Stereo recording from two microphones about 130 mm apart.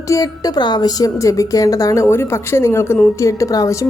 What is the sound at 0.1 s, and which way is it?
A woman's voice, 30° left (ahead or behind).